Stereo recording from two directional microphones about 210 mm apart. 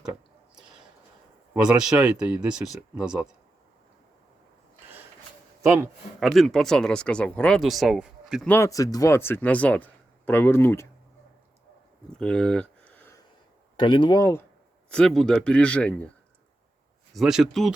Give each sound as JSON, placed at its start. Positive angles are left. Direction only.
{"t": 0.0, "sound": "a sound", "side_deg": -5}
{"t": 1.5, "sound": "speech", "side_deg": -5}
{"t": 6.1, "sound": "speech", "side_deg": 0}
{"t": 8.4, "sound": "speech", "side_deg": 10}
{"t": 12.1, "sound": "a sound", "side_deg": 5}
{"t": 13.7, "sound": "speech", "side_deg": 20}
{"t": 14.8, "sound": "speech", "side_deg": 5}
{"t": 17.2, "sound": "speech", "side_deg": 0}